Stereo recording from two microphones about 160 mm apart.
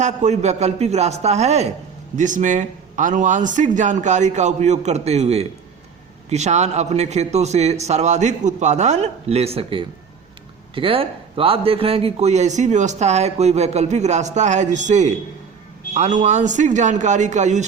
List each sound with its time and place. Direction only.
0.0 s speech: 45° right (ahead or behind)